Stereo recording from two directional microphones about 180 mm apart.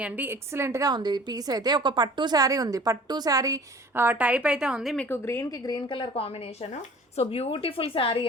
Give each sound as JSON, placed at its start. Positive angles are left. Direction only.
{"t": 0.0, "sound": "a woman's voice", "side_deg": -10}
{"t": 5.0, "sound": "a woman's voice", "side_deg": 15}